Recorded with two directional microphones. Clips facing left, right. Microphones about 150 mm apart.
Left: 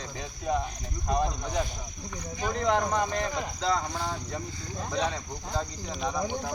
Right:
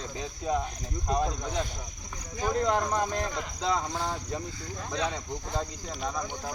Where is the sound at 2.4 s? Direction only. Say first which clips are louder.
Even; 10° right (ahead or behind).